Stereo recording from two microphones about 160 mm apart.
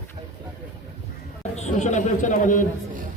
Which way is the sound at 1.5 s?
45° left (ahead or behind).